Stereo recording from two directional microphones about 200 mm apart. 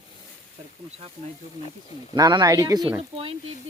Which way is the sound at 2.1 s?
20° right (ahead or behind).